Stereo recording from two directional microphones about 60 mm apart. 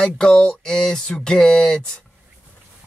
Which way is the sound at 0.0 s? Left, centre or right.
Centre.